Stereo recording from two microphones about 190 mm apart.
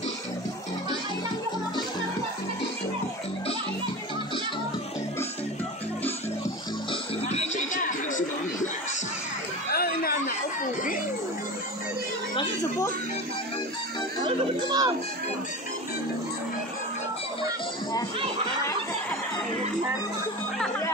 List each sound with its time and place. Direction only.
6.9 s music: 35° left (ahead or behind)
9.7 s a sound: 50° left (ahead or behind)
14.2 s music: 20° right (ahead or behind)